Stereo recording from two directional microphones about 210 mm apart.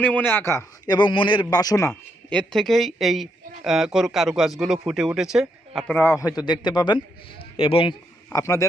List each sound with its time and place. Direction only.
0.0 s a man's voice: 10° left (ahead or behind)
6.1 s a man's voice: 15° left (ahead or behind)